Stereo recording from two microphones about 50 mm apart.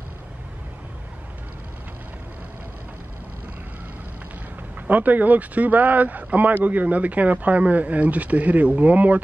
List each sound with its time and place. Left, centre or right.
4.8 s speech: right